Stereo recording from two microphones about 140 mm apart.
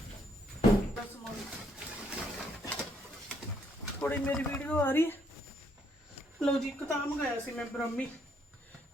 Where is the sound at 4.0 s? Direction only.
10° left (ahead or behind).